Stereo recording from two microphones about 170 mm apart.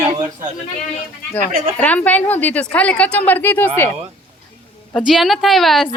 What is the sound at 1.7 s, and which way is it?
A woman's voice, 10° left (ahead or behind).